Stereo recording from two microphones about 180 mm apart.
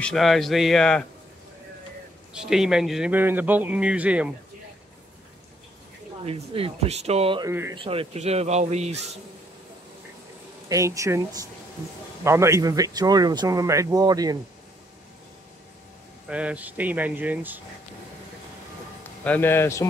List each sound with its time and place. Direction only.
0.0 s speech: centre (ahead or behind)
2.3 s a man's voice: 5° right (ahead or behind)
6.2 s speech: 30° right (ahead or behind)
7.4 s a man's voice: 15° right (ahead or behind)
7.7 s speech: 30° right (ahead or behind)
10.7 s a man's voice: 15° right (ahead or behind)
16.3 s a man's voice: 5° right (ahead or behind)
19.2 s speech: 10° left (ahead or behind)